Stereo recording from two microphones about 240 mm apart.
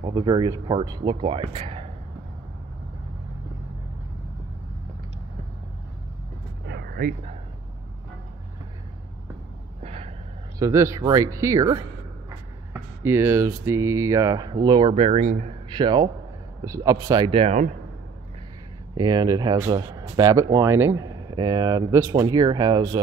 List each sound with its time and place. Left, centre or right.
0.0 s speech: centre
6.6 s vehicle: right
9.8 s a sound: right
10.6 s speech: centre; by 17.7 s right
18.9 s speech: centre